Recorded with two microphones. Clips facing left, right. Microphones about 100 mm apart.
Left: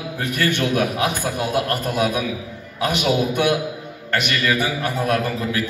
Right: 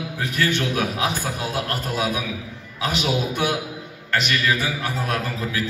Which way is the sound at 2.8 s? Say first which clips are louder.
Left 4 dB; 55° left (ahead or behind).